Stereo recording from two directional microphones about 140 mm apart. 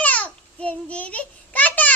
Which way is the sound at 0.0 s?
10° left (ahead or behind).